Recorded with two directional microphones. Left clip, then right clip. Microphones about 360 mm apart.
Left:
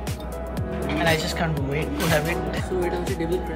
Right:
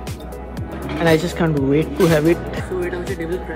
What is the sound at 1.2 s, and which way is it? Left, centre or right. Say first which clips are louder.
Speech: right 6 dB; centre.